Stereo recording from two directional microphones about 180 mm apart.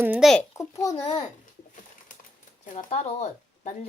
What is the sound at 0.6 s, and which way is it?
Speech, 20° left (ahead or behind).